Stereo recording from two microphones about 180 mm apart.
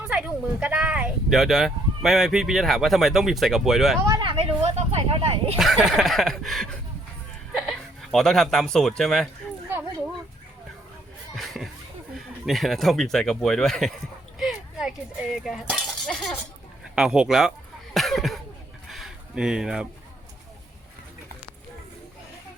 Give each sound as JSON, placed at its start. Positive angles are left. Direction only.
{"t": 0.1, "sound": "speech", "side_deg": -5}
{"t": 4.0, "sound": "speech", "side_deg": -25}
{"t": 5.5, "sound": "speech", "side_deg": 0}
{"t": 11.3, "sound": "a sound", "side_deg": 0}
{"t": 12.1, "sound": "speech", "side_deg": 0}
{"t": 14.3, "sound": "chink", "side_deg": -5}
{"t": 16.9, "sound": "speech", "side_deg": -5}
{"t": 17.9, "sound": "a sound", "side_deg": 0}